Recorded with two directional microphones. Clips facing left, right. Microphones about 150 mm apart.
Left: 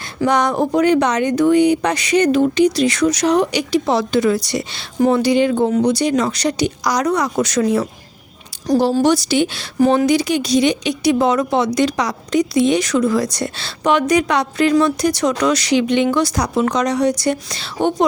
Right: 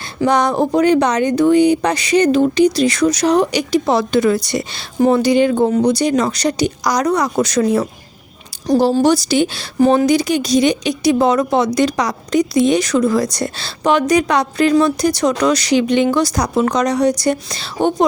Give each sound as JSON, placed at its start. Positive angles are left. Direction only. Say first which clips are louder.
{"t": 0.3, "sound": "speech", "louder": "right 2 dB", "side_deg": -35}
{"t": 4.9, "sound": "speech", "louder": "right 2 dB", "side_deg": -30}
{"t": 5.2, "sound": "speech", "louder": "right 2 dB", "side_deg": -45}
{"t": 8.6, "sound": "speech", "louder": "right 2 dB", "side_deg": -25}